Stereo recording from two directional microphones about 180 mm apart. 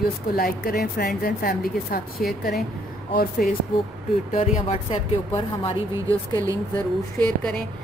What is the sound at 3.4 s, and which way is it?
Speech, 55° left (ahead or behind).